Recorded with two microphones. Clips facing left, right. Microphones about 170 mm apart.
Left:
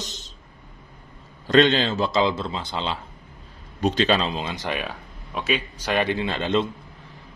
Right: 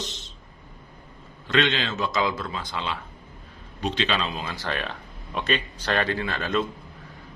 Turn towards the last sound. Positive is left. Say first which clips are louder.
# left 3 dB
turn(degrees=25)  # may be behind; listen again after turning